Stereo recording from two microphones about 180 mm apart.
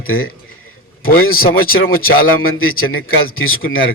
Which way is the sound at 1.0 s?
55° left (ahead or behind).